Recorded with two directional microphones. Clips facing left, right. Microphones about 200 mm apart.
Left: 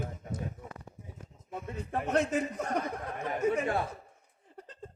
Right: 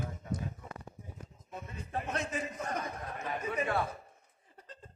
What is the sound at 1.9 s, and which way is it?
Speech, 55° left (ahead or behind).